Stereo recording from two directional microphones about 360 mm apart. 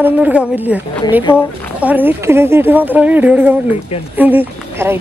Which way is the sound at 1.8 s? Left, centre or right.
Centre.